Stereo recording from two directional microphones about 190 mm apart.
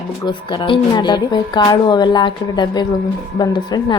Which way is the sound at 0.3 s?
25° left (ahead or behind).